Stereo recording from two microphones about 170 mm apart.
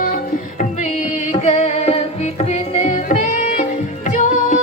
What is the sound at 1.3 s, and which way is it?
Music, 40° left (ahead or behind).